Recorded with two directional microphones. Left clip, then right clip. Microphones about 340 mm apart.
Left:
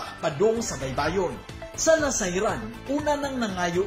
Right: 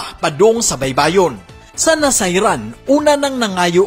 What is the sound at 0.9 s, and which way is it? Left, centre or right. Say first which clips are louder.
Speech: right 13 dB; right.